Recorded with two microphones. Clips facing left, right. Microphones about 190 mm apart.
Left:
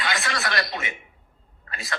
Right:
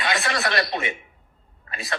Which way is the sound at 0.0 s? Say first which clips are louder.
Right 3 dB; 25° right (ahead or behind).